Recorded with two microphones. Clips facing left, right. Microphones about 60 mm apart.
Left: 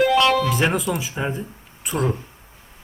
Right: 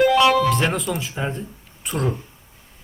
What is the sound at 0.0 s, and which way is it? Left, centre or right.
Music, centre.